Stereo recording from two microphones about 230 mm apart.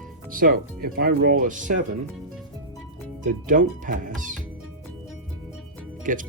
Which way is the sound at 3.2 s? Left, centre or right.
Right.